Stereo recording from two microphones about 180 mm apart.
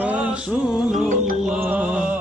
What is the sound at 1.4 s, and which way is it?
Music, 5° right (ahead or behind).